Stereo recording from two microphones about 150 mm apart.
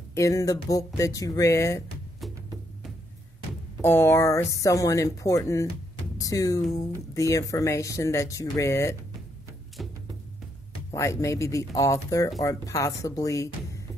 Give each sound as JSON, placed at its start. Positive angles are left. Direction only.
{"t": 0.1, "sound": "speech", "side_deg": 20}
{"t": 3.8, "sound": "speech", "side_deg": 15}
{"t": 9.8, "sound": "music", "side_deg": 0}
{"t": 10.9, "sound": "speech", "side_deg": 20}